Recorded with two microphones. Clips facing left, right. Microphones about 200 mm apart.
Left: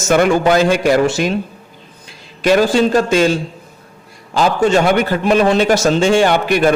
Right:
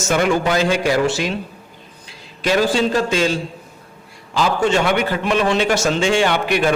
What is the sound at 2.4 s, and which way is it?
Speech, 50° left (ahead or behind).